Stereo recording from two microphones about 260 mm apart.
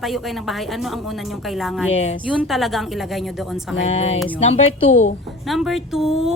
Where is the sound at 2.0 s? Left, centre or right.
Left.